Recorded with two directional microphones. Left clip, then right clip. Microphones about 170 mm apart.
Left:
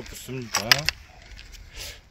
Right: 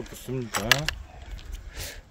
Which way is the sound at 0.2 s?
55° right (ahead or behind).